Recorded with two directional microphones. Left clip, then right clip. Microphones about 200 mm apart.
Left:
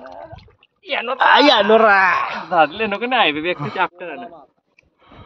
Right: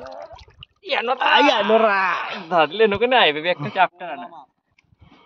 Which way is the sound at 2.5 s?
50° right (ahead or behind).